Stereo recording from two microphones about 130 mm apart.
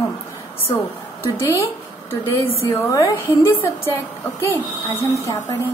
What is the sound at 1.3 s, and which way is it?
A woman's voice, 20° left (ahead or behind).